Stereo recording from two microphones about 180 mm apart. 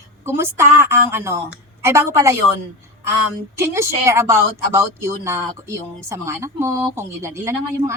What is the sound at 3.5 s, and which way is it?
Speech, 15° right (ahead or behind).